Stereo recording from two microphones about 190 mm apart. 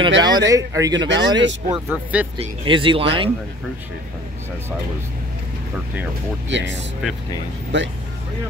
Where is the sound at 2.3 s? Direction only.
25° right (ahead or behind).